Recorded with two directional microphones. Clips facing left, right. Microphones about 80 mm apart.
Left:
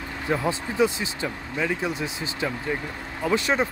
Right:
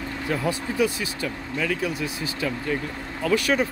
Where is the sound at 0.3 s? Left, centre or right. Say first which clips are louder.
Left 1 dB; left.